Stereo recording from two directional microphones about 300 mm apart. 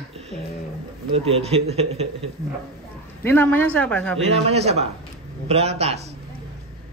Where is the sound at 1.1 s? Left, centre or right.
Centre.